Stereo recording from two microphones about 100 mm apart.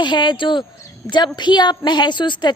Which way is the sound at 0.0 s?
50° left (ahead or behind).